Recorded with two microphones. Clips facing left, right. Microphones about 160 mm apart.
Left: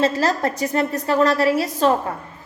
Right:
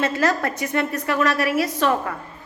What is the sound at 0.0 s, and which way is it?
A woman's voice, 30° left (ahead or behind).